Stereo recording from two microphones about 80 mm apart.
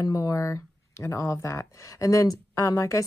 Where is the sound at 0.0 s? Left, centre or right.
Left.